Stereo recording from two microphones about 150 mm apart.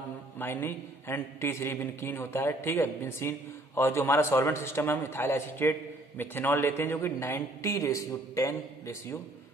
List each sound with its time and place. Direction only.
0.4 s a man's voice: 15° left (ahead or behind)